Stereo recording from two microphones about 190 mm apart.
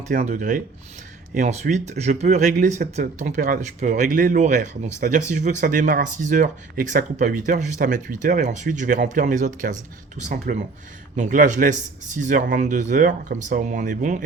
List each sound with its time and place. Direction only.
0.1 s speech: 40° right (ahead or behind)